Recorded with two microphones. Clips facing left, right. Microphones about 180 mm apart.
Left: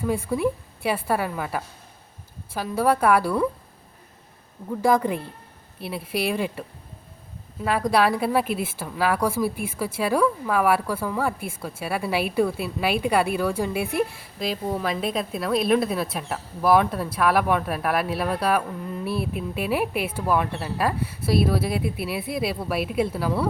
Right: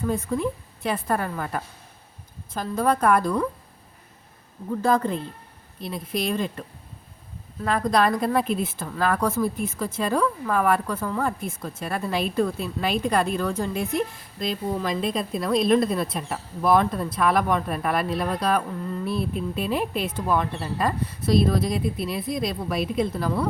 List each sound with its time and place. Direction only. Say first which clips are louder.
0.0 s speech: left 2 dB; 10° left (ahead or behind)
4.8 s speech: left 2 dB; 10° left (ahead or behind)